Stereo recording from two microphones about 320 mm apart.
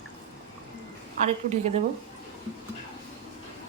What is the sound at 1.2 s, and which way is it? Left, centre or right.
Speech, right.